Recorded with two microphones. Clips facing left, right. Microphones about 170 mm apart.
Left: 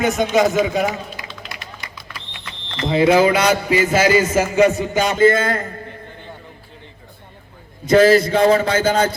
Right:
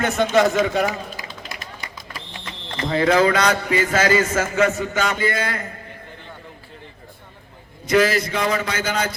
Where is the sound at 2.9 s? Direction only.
20° left (ahead or behind).